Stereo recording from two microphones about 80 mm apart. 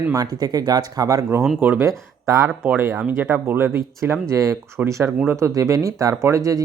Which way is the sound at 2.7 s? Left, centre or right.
Right.